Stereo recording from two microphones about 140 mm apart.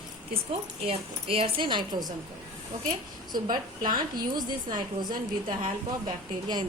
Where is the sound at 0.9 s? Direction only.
45° right (ahead or behind).